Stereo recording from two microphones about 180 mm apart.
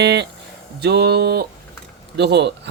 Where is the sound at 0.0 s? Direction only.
70° right (ahead or behind).